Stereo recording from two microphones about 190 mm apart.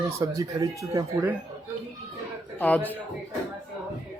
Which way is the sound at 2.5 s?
10° left (ahead or behind).